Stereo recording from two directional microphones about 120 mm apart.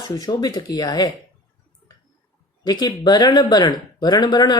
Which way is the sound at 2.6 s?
35° left (ahead or behind).